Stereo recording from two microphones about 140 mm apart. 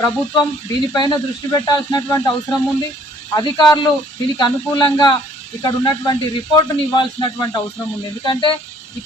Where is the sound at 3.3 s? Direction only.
30° left (ahead or behind).